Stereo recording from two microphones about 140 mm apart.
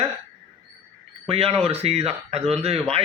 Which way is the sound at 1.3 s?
45° right (ahead or behind).